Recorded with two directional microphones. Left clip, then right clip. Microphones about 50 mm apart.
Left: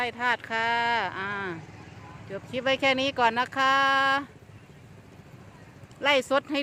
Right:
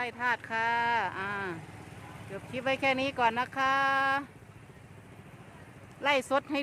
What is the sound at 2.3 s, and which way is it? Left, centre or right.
Speech, left.